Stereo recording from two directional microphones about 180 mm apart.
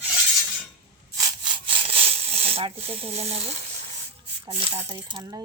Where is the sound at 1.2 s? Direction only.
25° right (ahead or behind).